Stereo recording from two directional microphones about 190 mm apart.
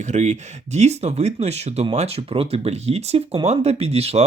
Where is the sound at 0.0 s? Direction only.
40° right (ahead or behind).